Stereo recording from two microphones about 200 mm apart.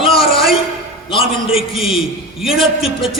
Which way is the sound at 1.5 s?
Centre (ahead or behind).